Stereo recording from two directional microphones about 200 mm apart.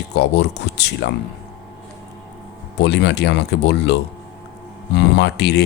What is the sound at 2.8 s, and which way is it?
Speech, 60° left (ahead or behind).